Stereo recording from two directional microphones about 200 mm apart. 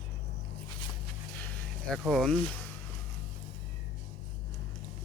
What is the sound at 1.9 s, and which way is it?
Speech, centre (ahead or behind).